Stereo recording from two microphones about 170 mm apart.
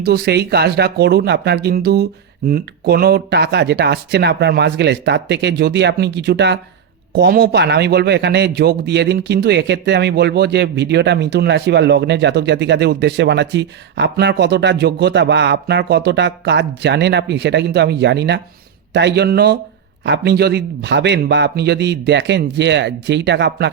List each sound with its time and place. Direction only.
0.0 s speech: 70° right (ahead or behind); by 6.6 s 90° right
7.1 s a man's voice: 75° right (ahead or behind); by 23.6 s 90° right